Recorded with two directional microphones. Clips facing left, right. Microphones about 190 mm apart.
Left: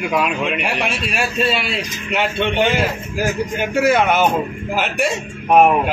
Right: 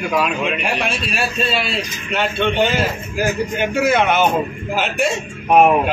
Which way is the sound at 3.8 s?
10° left (ahead or behind).